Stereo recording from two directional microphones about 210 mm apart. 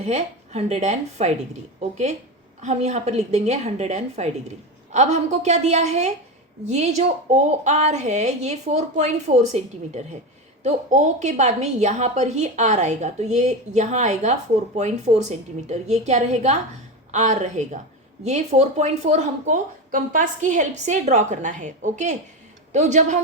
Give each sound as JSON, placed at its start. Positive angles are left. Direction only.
{"t": 0.0, "sound": "speech", "side_deg": -35}
{"t": 2.6, "sound": "speech", "side_deg": -35}